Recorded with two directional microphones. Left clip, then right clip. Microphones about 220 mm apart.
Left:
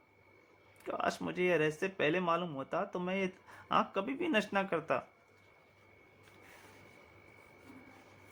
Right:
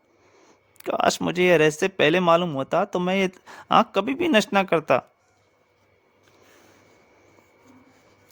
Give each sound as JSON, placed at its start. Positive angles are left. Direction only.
{"t": 0.9, "sound": "speech", "side_deg": -50}